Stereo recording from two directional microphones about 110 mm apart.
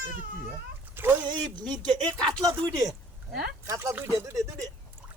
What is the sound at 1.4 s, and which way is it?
Speech, 40° right (ahead or behind).